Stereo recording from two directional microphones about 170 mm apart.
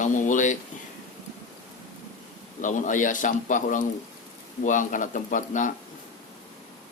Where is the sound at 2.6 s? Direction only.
50° left (ahead or behind).